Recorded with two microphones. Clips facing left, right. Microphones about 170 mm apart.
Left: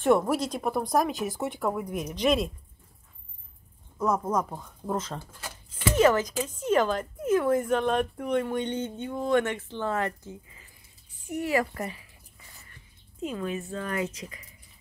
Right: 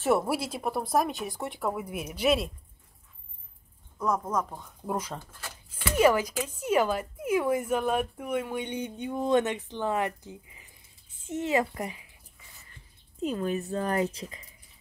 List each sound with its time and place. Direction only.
0.0 s speech: 5° right (ahead or behind)
4.0 s speech: 5° left (ahead or behind)
4.6 s speech: 10° right (ahead or behind)
5.7 s a sound: 10° right (ahead or behind)
6.4 s speech: 10° right (ahead or behind)
13.3 s speech: 40° right (ahead or behind)